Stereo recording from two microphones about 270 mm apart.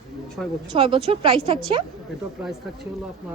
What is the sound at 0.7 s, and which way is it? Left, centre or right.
Speech, centre.